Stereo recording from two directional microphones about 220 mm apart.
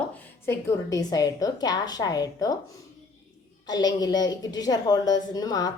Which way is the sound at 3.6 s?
15° left (ahead or behind).